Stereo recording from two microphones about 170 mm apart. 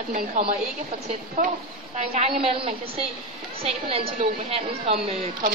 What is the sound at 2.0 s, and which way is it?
A woman's voice, 40° right (ahead or behind).